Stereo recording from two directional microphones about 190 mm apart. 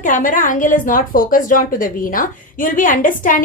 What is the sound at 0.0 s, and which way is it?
A woman's voice, 45° left (ahead or behind).